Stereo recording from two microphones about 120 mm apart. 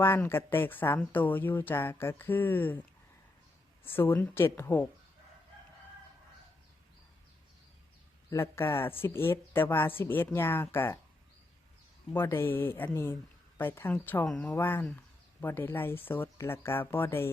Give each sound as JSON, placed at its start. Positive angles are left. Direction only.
{"t": 0.0, "sound": "speech", "side_deg": 20}
{"t": 3.8, "sound": "speech", "side_deg": 15}
{"t": 8.3, "sound": "speech", "side_deg": 25}
{"t": 12.1, "sound": "speech", "side_deg": 20}
{"t": 14.3, "sound": "speech", "side_deg": 5}
{"t": 14.5, "sound": "speech", "side_deg": 15}